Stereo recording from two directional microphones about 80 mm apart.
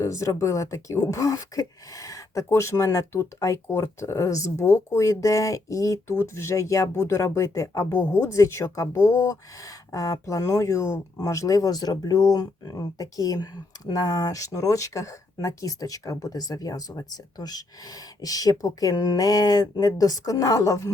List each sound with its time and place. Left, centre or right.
0.0 s speech: left
7.9 s speech: left